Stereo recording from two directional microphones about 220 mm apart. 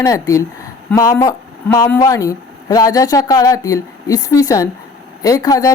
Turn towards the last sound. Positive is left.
turn(degrees=15)  # may be behind; listen again after turning